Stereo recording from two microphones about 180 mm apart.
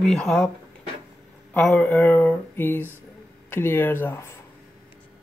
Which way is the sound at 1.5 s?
5° left (ahead or behind).